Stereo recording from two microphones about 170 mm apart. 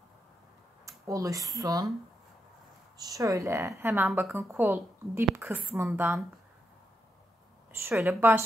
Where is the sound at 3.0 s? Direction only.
20° right (ahead or behind).